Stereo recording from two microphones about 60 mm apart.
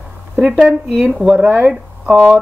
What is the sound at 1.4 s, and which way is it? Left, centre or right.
Speech, right.